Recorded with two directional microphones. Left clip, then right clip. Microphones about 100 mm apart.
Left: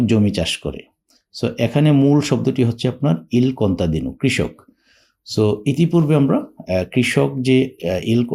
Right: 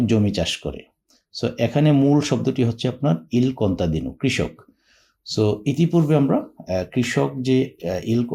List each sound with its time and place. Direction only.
0.0 s speech: 40° left (ahead or behind)